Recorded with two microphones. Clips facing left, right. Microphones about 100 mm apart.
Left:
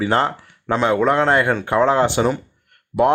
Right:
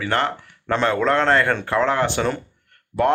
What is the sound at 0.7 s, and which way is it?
Speech, 10° left (ahead or behind).